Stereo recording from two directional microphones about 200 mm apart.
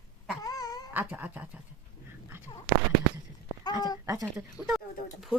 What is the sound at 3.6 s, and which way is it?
Speech, 20° left (ahead or behind).